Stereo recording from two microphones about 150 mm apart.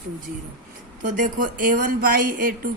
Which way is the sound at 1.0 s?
60° right (ahead or behind).